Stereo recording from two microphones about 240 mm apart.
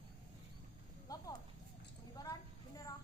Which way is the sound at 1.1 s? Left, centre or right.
Centre.